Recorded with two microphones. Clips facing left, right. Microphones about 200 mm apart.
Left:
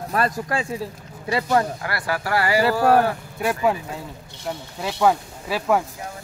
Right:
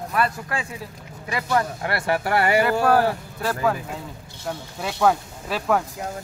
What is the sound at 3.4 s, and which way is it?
Speech, 15° left (ahead or behind).